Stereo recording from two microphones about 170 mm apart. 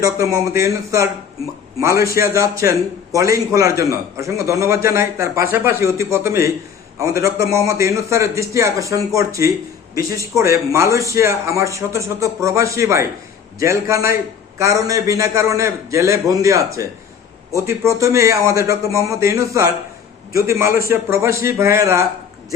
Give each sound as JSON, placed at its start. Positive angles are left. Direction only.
{"t": 0.0, "sound": "a man's voice", "side_deg": -20}